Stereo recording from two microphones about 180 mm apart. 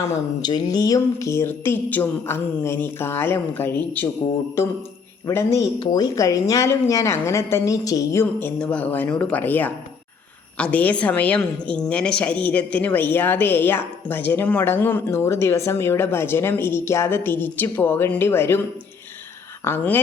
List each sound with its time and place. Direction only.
0.0 s speech: 25° left (ahead or behind)
19.6 s speech: 10° left (ahead or behind)